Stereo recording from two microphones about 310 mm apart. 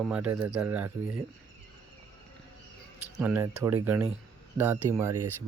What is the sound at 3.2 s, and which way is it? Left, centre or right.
Speech, centre.